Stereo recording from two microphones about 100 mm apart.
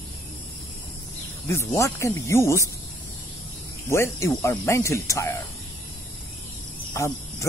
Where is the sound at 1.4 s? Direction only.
30° left (ahead or behind).